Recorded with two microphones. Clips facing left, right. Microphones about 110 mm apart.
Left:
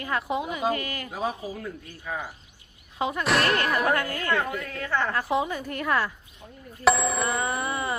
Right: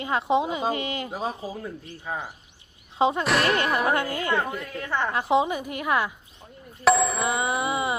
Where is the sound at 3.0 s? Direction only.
25° right (ahead or behind).